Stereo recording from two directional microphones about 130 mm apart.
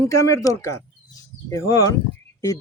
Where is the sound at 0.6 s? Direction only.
25° left (ahead or behind).